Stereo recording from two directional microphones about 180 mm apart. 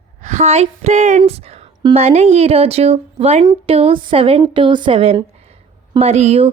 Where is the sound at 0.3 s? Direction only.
40° right (ahead or behind).